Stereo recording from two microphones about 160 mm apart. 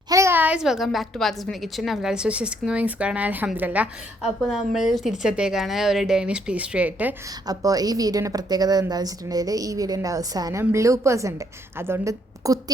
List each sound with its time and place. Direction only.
0.1 s a woman's voice: 15° right (ahead or behind)
7.4 s a woman's voice: 25° right (ahead or behind)